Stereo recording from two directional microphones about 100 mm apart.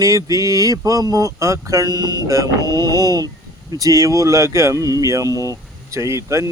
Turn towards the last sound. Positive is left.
turn(degrees=-30)  # may be behind; listen again after turning